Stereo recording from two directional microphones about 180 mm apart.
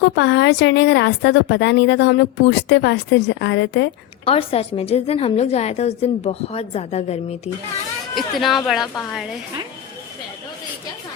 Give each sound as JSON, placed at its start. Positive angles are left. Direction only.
{"t": 0.0, "sound": "a woman's voice", "side_deg": 80}
{"t": 4.3, "sound": "a woman's voice", "side_deg": 35}
{"t": 8.1, "sound": "speech", "side_deg": 0}